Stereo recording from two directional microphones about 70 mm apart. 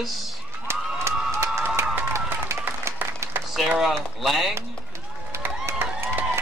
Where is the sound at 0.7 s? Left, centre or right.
Right.